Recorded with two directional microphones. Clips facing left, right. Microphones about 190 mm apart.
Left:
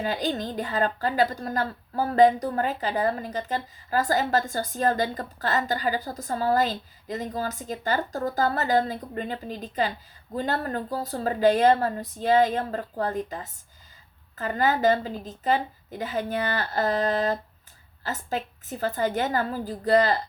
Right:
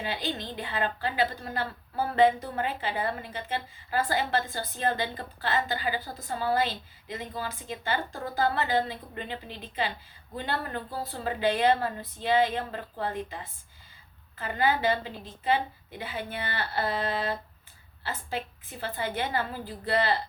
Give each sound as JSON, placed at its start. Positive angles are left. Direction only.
{"t": 0.0, "sound": "a woman's voice", "side_deg": 45}